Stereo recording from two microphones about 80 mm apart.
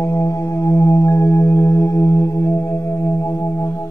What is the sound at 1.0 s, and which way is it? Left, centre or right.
Singing bowl, left.